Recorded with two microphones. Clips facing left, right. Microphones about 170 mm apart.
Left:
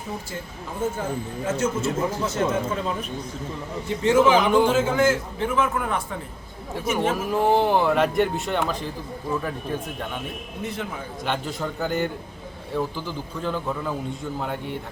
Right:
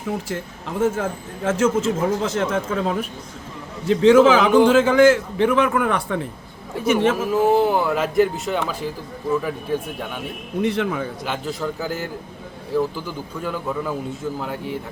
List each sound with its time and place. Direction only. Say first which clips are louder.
1.5 s a man's voice: right 6 dB; 90° right
3.8 s a man's voice: right 6 dB; 90° right; by 7.3 s 75° right (ahead or behind)
7.3 s speech: right 1 dB; centre (ahead or behind)
10.6 s a man's voice: right 10 dB; 80° right
11.3 s a man's voice: left 2 dB; centre (ahead or behind)